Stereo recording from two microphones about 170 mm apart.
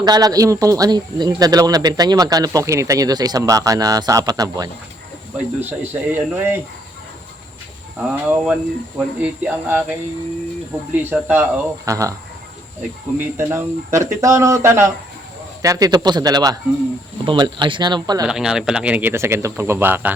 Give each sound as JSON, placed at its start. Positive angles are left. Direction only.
{"t": 0.0, "sound": "speech", "side_deg": -20}
{"t": 5.5, "sound": "speech", "side_deg": -10}
{"t": 7.9, "sound": "speech", "side_deg": -10}
{"t": 10.9, "sound": "speech", "side_deg": -10}
{"t": 13.1, "sound": "speech", "side_deg": -15}
{"t": 18.3, "sound": "speech", "side_deg": -5}